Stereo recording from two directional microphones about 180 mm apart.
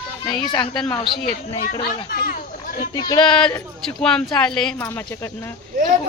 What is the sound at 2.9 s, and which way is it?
Speech, 20° left (ahead or behind).